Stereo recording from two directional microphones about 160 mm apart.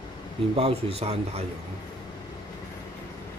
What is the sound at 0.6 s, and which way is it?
Speech, 40° right (ahead or behind).